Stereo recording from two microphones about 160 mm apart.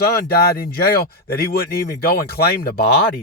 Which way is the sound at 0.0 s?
80° left.